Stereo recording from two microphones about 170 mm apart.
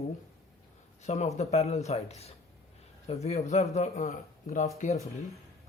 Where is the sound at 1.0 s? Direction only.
40° left (ahead or behind).